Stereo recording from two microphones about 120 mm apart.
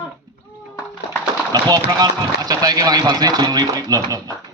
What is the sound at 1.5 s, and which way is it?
Speech, 35° right (ahead or behind).